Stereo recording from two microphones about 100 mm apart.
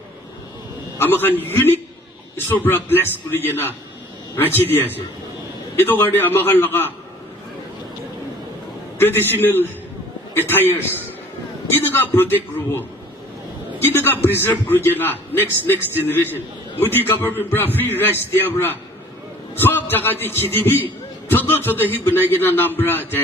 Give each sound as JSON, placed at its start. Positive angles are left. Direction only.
{"t": 0.9, "sound": "a man's voice", "side_deg": 20}
{"t": 9.0, "sound": "a man's voice", "side_deg": 20}
{"t": 11.8, "sound": "a man's voice", "side_deg": 20}
{"t": 13.8, "sound": "a man's voice", "side_deg": 20}